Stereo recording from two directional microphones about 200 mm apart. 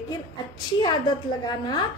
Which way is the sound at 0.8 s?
20° left (ahead or behind).